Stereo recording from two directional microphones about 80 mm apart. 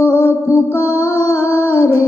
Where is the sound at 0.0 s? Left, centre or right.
Left.